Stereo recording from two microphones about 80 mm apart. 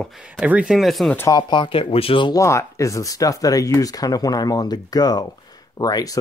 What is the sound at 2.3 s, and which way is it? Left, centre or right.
Speech, left.